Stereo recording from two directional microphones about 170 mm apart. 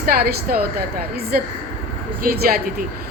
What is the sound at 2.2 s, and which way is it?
Speech, 60° right (ahead or behind).